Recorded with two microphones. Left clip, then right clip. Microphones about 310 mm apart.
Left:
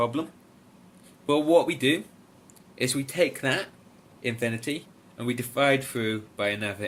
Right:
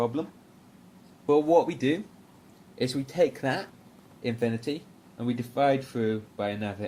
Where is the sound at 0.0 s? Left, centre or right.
Right.